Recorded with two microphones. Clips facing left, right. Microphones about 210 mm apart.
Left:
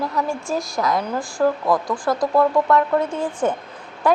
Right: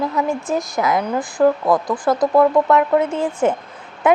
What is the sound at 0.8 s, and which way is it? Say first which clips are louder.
Speech: right 3 dB; 5° right (ahead or behind).